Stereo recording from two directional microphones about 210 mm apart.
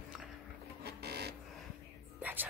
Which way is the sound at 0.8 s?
50° right (ahead or behind).